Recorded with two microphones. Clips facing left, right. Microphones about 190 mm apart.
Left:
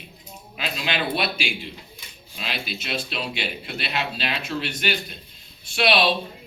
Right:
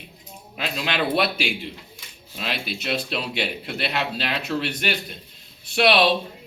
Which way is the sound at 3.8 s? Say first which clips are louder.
Right 2 dB; 60° right (ahead or behind).